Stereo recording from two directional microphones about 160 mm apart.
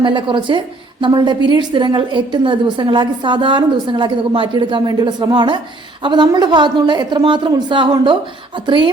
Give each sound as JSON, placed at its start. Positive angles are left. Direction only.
{"t": 0.0, "sound": "a woman's voice", "side_deg": -30}